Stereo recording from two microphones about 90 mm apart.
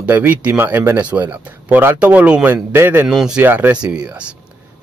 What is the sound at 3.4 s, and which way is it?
Speech, 20° right (ahead or behind).